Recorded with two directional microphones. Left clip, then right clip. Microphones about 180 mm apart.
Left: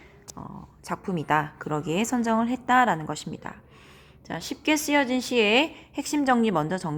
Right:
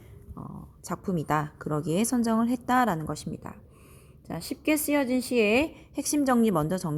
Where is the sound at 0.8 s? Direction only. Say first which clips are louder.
Left 3 dB; 30° right (ahead or behind).